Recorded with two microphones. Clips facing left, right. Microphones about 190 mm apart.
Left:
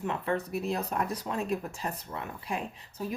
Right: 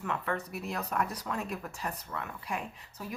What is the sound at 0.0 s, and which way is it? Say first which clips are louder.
Speech: left 3 dB; 25° left (ahead or behind).